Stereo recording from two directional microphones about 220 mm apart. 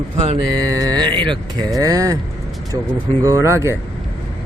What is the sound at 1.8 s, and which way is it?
Speech, 15° right (ahead or behind).